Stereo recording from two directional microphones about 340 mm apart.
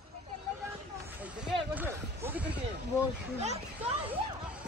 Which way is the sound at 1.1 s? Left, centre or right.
Centre.